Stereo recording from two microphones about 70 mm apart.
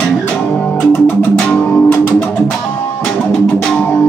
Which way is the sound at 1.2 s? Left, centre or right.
Left.